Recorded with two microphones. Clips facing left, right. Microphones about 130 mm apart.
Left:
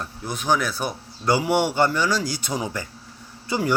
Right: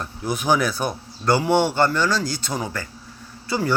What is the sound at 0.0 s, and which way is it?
Speech, 5° right (ahead or behind).